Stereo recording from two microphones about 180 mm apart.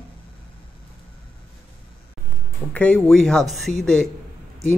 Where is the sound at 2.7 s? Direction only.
5° left (ahead or behind).